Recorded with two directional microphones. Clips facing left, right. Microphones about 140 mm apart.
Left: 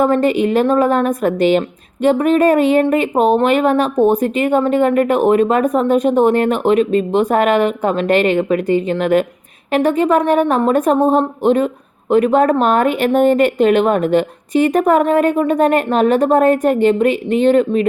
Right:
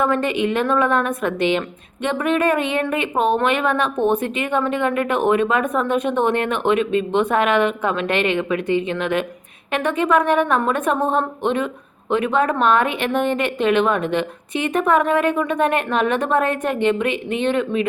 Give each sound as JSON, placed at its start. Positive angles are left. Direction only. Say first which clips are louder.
{"t": 0.0, "sound": "a woman's voice", "louder": "left 6 dB", "side_deg": 35}